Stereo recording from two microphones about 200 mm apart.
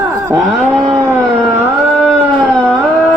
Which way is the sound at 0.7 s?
15° right (ahead or behind).